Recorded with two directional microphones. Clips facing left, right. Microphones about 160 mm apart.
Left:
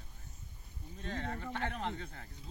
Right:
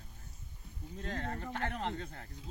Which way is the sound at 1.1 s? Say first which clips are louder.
Even; 45° right (ahead or behind).